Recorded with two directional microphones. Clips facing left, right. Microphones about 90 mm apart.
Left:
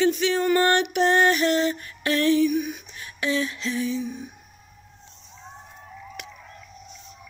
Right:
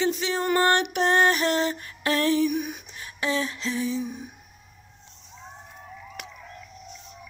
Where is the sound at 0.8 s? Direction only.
40° right (ahead or behind).